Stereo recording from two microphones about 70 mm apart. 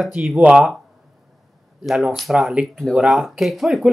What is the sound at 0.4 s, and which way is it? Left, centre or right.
Speech, centre.